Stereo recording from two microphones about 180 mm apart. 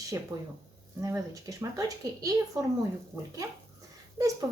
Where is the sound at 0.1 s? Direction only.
20° right (ahead or behind).